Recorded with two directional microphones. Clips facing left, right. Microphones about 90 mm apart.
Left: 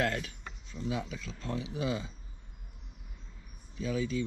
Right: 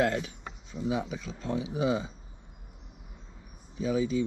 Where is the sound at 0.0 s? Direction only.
25° right (ahead or behind).